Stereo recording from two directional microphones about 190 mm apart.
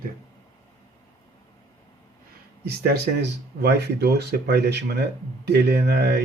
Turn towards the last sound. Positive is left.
turn(degrees=-60)  # may be behind; listen again after turning